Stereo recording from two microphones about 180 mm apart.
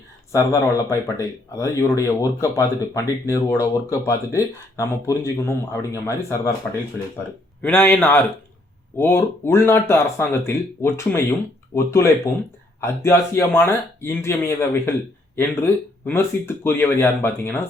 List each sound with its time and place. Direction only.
0.3 s speech: 15° left (ahead or behind)
7.6 s speech: 10° left (ahead or behind)